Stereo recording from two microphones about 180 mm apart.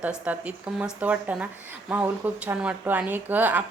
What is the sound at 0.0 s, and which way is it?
A woman's voice, 10° right (ahead or behind).